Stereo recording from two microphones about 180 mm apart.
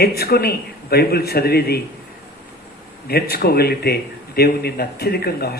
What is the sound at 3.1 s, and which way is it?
Speech, 60° left (ahead or behind).